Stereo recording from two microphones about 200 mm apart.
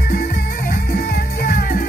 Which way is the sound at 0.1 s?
50° left (ahead or behind).